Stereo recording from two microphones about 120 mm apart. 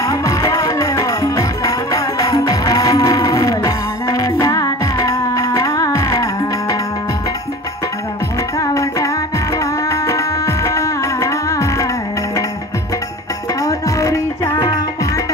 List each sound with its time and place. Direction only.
0.0 s music: 25° left (ahead or behind)
8.5 s music: 30° left (ahead or behind)
13.6 s music: 30° left (ahead or behind)